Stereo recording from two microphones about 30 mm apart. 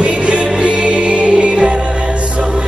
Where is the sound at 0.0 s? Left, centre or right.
Right.